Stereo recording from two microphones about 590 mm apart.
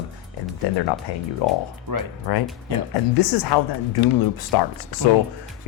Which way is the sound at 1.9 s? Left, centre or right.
Right.